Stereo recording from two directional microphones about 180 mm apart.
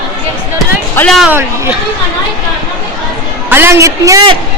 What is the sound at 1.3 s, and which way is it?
Speech, 10° right (ahead or behind).